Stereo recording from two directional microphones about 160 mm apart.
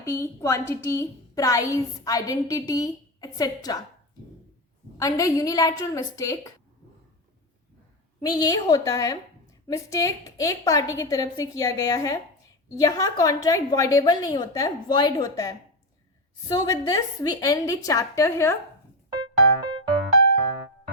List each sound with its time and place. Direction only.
0.0 s a woman's voice: 20° left (ahead or behind)
4.9 s a woman's voice: 20° left (ahead or behind)
8.2 s a woman's voice: 25° left (ahead or behind)